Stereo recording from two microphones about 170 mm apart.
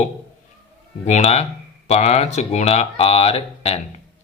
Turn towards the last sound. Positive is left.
turn(degrees=35)  # may be behind; listen again after turning